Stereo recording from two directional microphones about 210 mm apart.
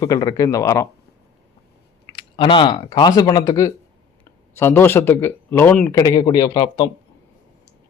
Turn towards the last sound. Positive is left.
turn(degrees=20)  # may be behind; listen again after turning